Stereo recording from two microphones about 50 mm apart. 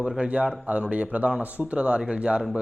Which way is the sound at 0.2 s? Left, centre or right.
Right.